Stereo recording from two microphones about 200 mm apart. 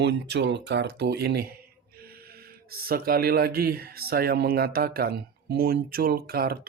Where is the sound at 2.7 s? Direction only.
50° right (ahead or behind).